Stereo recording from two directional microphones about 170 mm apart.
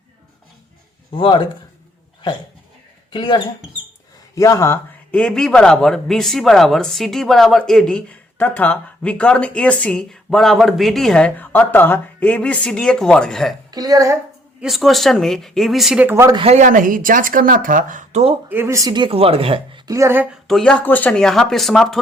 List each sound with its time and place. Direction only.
1.1 s speech: 30° left (ahead or behind)
3.1 s speech: 25° left (ahead or behind)
4.4 s speech: 15° left (ahead or behind)
13.7 s a woman's voice: 20° right (ahead or behind)
14.6 s speech: centre (ahead or behind); by 16.4 s 15° right (ahead or behind)
16.4 s speech: 40° right (ahead or behind)
18.4 s speech: 15° right (ahead or behind); by 19.8 s 30° right (ahead or behind)
19.9 s speech: 15° right (ahead or behind)
20.5 s speech: 5° left (ahead or behind)